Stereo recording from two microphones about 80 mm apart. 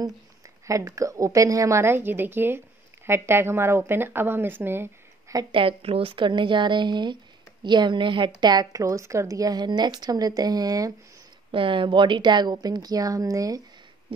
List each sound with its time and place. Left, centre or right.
0.7 s a woman's voice: right
5.3 s a woman's voice: right
6.1 s a woman's voice: right
8.4 s a woman's voice: right
11.5 s a woman's voice: right